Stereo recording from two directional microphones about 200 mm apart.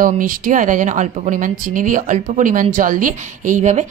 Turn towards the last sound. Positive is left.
turn(degrees=-40)  # may be behind; listen again after turning